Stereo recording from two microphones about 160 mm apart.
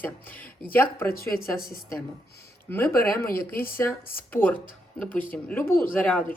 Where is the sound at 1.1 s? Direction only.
70° left (ahead or behind).